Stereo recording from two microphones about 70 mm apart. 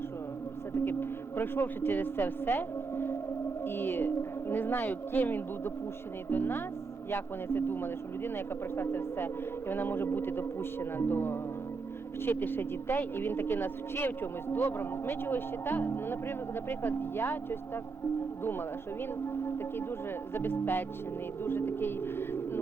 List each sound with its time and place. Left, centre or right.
0.9 s speech: left
20.3 s speech: left